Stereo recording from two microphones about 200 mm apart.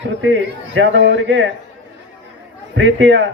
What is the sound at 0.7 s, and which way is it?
Speech, 65° right (ahead or behind).